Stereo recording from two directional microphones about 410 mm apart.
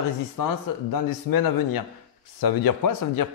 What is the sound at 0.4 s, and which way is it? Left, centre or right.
A man's voice, left.